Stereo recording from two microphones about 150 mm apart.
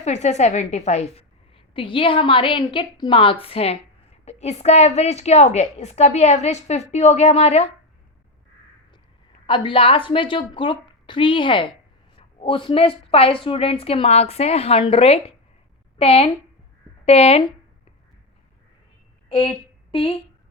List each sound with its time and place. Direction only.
0.0 s a woman's voice: 50° left (ahead or behind)
9.5 s a woman's voice: 35° left (ahead or behind)
19.3 s speech: 35° left (ahead or behind)